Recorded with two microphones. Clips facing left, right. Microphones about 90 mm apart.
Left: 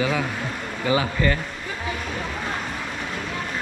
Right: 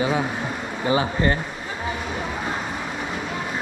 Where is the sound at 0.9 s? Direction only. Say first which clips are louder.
Right 1 dB; 30° right (ahead or behind).